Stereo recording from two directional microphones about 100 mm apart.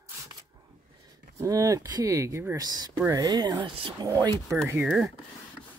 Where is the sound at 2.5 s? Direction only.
40° right (ahead or behind).